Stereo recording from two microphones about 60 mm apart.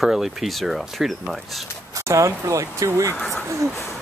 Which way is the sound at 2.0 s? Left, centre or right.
Right.